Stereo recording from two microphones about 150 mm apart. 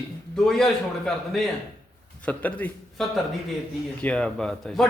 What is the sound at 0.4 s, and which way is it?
A man's voice, centre (ahead or behind).